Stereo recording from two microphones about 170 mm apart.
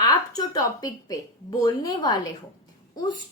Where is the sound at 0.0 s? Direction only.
20° left (ahead or behind).